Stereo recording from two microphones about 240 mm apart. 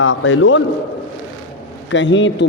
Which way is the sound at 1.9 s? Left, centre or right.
Left.